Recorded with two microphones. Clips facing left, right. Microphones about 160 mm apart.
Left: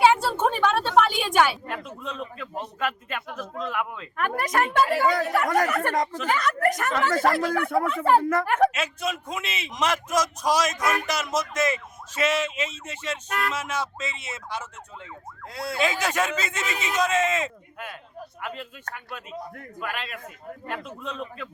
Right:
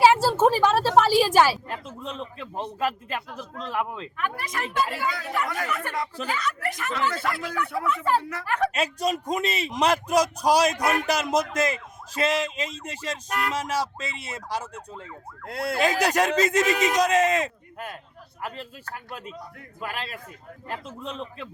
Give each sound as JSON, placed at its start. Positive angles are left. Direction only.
{"t": 0.4, "sound": "a woman's voice", "side_deg": -30}
{"t": 4.2, "sound": "a woman's voice", "side_deg": 55}
{"t": 8.7, "sound": "a woman's voice", "side_deg": -40}
{"t": 15.8, "sound": "a woman's voice", "side_deg": -35}